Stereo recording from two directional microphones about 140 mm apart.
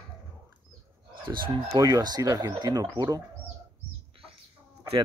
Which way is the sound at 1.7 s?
25° right (ahead or behind).